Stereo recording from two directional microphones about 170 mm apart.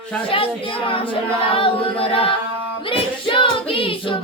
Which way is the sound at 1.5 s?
30° left (ahead or behind).